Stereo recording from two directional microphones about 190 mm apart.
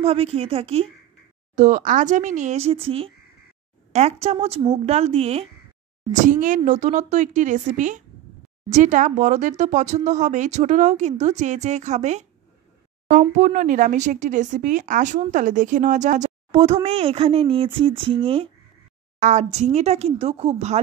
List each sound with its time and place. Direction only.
0.0 s speech: 30° right (ahead or behind)
6.1 s speech: 40° right (ahead or behind)